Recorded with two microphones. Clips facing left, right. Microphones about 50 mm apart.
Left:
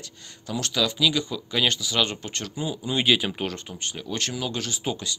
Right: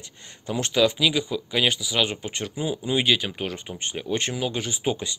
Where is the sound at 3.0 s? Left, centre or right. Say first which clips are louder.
Left 4 dB; centre.